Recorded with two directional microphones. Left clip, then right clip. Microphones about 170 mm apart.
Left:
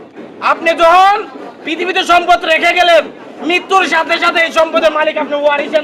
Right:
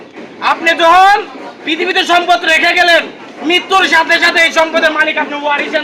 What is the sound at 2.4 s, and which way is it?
A man's voice, 25° left (ahead or behind).